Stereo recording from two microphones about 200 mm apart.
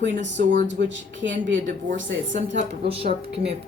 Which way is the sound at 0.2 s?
65° right (ahead or behind).